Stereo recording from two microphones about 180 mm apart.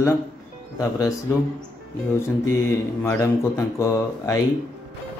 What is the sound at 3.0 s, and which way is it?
Speech, 15° left (ahead or behind).